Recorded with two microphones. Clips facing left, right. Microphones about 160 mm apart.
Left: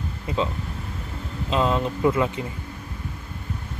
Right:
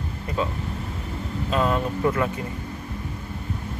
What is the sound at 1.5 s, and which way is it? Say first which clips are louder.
Speech: left 1 dB; 20° left (ahead or behind).